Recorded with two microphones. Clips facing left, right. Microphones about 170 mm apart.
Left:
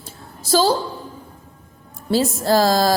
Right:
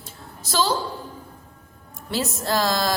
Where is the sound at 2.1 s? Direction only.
35° left (ahead or behind).